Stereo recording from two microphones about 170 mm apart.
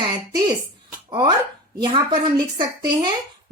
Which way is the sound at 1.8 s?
25° right (ahead or behind).